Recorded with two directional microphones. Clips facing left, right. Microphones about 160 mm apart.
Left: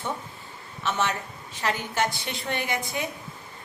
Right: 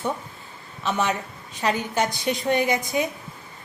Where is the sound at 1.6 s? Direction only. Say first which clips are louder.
Right 3 dB; 20° right (ahead or behind).